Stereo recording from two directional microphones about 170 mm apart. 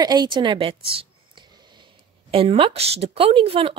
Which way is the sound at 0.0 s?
25° right (ahead or behind).